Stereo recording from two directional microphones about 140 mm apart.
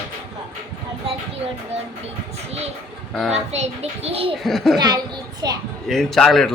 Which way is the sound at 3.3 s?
50° right (ahead or behind).